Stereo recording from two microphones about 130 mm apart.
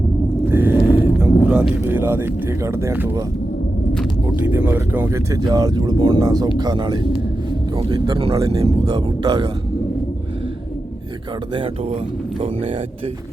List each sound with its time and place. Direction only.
0.4 s a sound: 15° right (ahead or behind)
1.5 s speech: 10° right (ahead or behind)
4.4 s speech: 15° right (ahead or behind)
5.3 s speech: 30° right (ahead or behind)
8.9 s speech: 30° right (ahead or behind)
11.5 s speech: 45° right (ahead or behind)